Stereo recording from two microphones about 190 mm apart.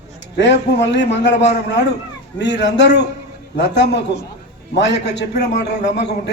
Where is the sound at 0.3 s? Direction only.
65° left (ahead or behind).